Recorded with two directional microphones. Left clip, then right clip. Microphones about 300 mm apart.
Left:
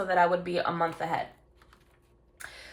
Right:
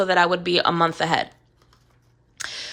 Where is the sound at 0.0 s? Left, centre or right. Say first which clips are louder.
Right 6 dB; centre.